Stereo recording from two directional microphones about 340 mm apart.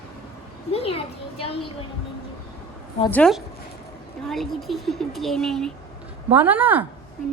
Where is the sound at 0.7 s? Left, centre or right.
Centre.